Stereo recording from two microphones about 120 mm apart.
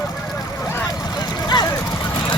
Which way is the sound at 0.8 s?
35° left (ahead or behind).